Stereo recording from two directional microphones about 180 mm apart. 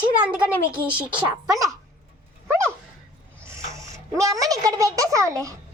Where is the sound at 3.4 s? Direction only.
15° right (ahead or behind).